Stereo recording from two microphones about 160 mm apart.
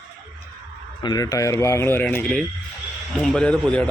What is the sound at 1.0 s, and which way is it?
Speech, 25° left (ahead or behind).